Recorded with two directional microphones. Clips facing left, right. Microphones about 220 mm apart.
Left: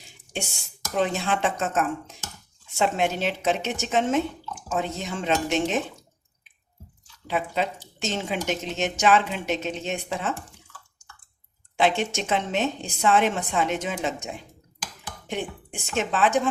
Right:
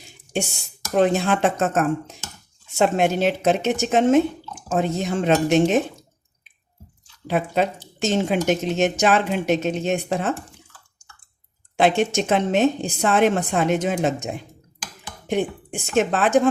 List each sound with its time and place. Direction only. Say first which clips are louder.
0.9 s a woman's voice: right 6 dB; 50° right (ahead or behind)
7.3 s a woman's voice: right 5 dB; 50° right (ahead or behind)
11.8 s a woman's voice: right 5 dB; 50° right (ahead or behind)